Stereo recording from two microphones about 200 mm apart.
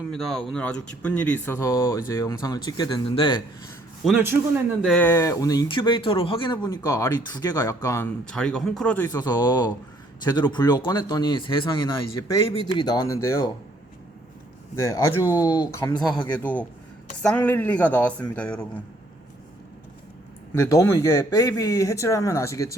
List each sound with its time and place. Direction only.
0.1 s speech: centre (ahead or behind); by 3.4 s 25° left (ahead or behind)
4.0 s a man's voice: 10° right (ahead or behind)
4.9 s speech: 10° left (ahead or behind)
9.1 s speech: 20° left (ahead or behind)
14.8 s speech: 15° left (ahead or behind)
20.5 s speech: 15° left (ahead or behind)